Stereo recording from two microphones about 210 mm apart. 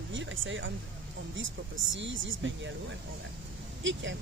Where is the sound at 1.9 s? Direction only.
65° right (ahead or behind).